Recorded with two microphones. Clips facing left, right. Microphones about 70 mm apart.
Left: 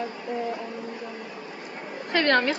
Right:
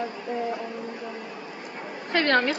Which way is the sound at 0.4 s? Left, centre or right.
Centre.